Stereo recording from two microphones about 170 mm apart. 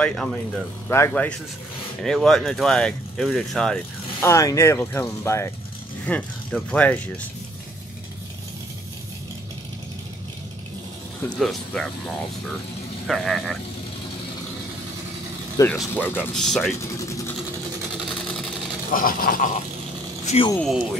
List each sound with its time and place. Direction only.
0.0 s speech: 5° left (ahead or behind)
2.0 s speech: 5° left (ahead or behind)
4.3 s speech: 15° left (ahead or behind)
11.1 s speech: 5° left (ahead or behind)
13.0 s speech: centre (ahead or behind)
15.7 s speech: 10° left (ahead or behind)
16.7 s vehicle: 20° left (ahead or behind)
18.0 s vehicle: centre (ahead or behind)
18.9 s a sound: 55° left (ahead or behind)
20.2 s speech: 35° left (ahead or behind)
20.5 s speech: centre (ahead or behind)